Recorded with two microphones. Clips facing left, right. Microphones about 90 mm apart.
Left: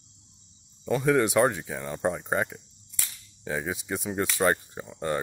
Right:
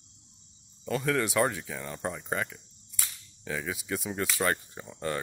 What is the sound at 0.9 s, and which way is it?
Speech, 20° left (ahead or behind).